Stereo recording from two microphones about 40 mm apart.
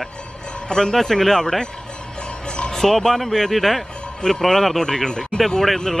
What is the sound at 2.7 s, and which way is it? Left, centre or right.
Speech, centre.